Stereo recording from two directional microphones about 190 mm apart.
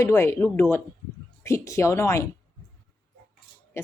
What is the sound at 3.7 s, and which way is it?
Speech, 15° left (ahead or behind).